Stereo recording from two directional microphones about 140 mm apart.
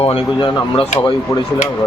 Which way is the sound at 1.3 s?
25° left (ahead or behind).